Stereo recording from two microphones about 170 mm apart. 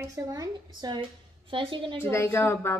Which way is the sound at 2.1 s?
15° left (ahead or behind).